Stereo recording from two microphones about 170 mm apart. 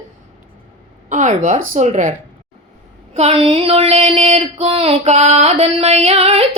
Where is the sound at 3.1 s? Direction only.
35° right (ahead or behind).